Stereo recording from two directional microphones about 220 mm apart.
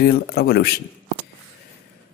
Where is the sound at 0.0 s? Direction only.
45° left (ahead or behind).